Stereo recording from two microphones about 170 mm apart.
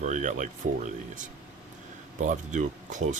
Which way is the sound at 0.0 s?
45° right (ahead or behind).